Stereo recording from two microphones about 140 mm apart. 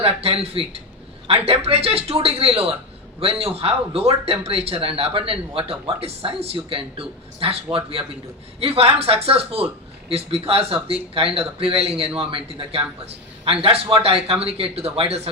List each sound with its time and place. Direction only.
0.0 s a man's voice: 45° right (ahead or behind)